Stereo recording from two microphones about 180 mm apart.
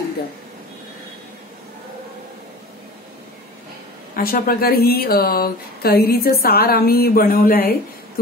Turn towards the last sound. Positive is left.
turn(degrees=55)  # may be behind; listen again after turning